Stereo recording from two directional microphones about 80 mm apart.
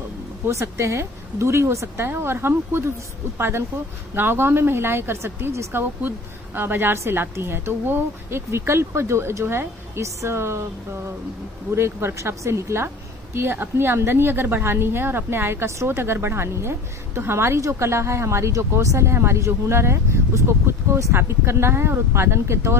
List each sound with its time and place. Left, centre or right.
0.5 s a woman's voice: right
11.7 s a woman's voice: right